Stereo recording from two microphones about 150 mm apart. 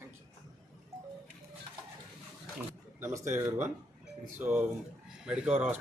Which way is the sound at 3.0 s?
20° right (ahead or behind).